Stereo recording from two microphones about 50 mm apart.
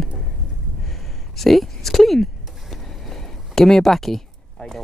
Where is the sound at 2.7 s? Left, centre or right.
Centre.